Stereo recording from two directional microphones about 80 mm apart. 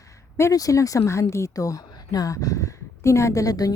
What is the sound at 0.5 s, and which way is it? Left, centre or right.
Speech, left.